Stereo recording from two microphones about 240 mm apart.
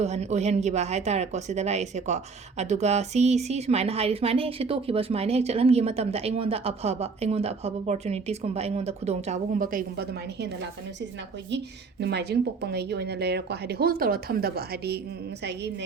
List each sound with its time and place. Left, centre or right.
0.0 s a woman's voice: right
11.5 s a woman's voice: right